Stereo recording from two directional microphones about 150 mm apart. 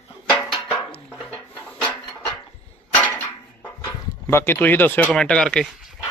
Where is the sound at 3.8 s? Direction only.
20° left (ahead or behind).